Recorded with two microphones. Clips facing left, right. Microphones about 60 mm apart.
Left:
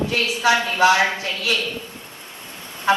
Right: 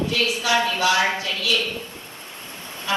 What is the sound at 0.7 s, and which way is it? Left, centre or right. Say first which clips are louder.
Speech: left 4 dB; left.